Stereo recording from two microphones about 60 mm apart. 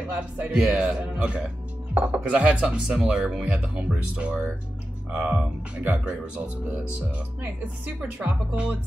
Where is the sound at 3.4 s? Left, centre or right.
Centre.